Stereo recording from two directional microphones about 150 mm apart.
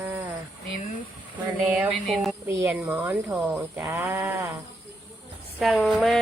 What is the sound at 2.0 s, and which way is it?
Speech, centre (ahead or behind).